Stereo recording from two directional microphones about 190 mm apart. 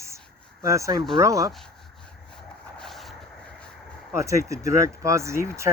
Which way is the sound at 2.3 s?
Centre (ahead or behind).